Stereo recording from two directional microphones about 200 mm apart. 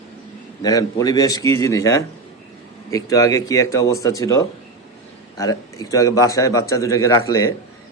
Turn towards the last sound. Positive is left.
turn(degrees=15)  # may be behind; listen again after turning